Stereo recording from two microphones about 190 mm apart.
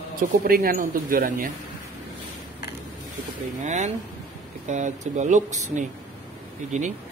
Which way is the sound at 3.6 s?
40° right (ahead or behind).